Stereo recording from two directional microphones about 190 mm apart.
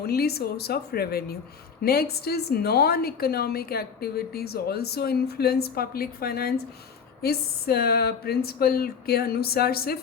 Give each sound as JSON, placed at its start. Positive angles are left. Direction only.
{"t": 0.0, "sound": "a woman's voice", "side_deg": 55}